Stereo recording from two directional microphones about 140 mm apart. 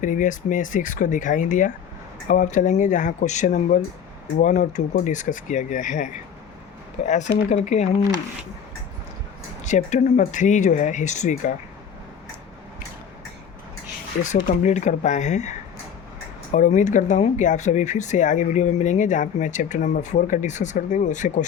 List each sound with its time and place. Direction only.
0.0 s speech: 65° left (ahead or behind)
9.6 s speech: 60° left (ahead or behind)
14.4 s speech: 60° left (ahead or behind)